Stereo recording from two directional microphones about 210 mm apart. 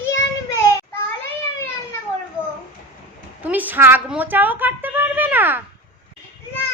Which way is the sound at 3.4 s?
10° right (ahead or behind).